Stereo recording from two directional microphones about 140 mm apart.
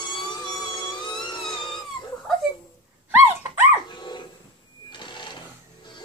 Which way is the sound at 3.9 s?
35° left (ahead or behind).